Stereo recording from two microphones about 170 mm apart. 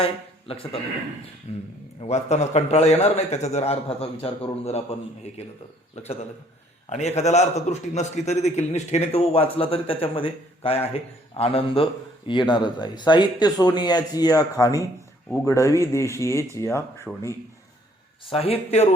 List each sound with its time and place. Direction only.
0.0 s a man's voice: 35° left (ahead or behind)
6.9 s a man's voice: 40° left (ahead or behind); by 17.1 s 15° left (ahead or behind)
18.3 s a man's voice: 35° left (ahead or behind)